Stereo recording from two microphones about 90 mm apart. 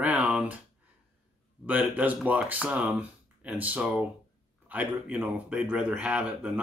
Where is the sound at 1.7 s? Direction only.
15° right (ahead or behind).